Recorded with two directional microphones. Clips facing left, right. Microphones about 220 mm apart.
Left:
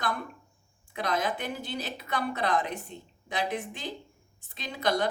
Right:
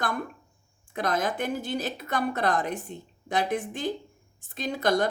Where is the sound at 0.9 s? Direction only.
50° right (ahead or behind).